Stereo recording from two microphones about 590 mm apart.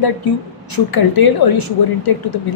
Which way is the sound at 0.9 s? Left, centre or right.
Left.